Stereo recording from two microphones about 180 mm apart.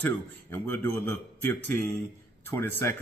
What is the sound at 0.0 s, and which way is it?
A man's voice, 10° left (ahead or behind).